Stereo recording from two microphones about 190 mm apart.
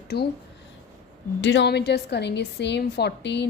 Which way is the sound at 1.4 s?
70° left (ahead or behind).